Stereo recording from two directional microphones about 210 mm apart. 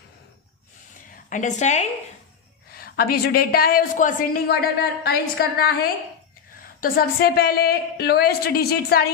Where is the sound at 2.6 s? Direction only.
45° left (ahead or behind).